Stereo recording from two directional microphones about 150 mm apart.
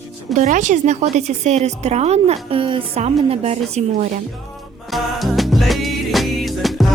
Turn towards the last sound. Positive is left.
turn(degrees=0)  # may be behind; listen again after turning